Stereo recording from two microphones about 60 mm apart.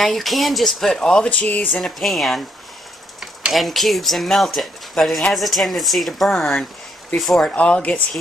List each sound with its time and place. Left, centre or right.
0.0 s speech: centre
1.3 s speech: left
1.8 s speech: centre
3.5 s speech: centre
7.3 s speech: centre